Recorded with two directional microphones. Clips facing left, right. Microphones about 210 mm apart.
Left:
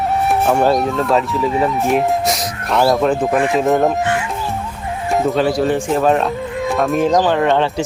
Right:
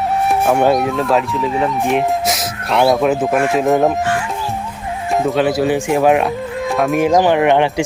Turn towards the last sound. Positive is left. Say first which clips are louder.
# right 2 dB
turn(degrees=-15)  # may be behind; listen again after turning